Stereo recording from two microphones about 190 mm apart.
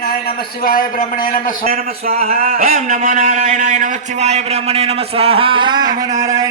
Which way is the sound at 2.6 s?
40° right (ahead or behind).